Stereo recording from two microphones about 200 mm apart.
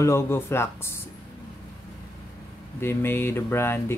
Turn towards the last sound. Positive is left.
turn(degrees=10)  # may be behind; listen again after turning